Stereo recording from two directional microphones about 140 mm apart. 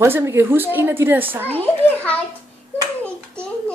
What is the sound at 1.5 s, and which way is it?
Speech, 10° left (ahead or behind).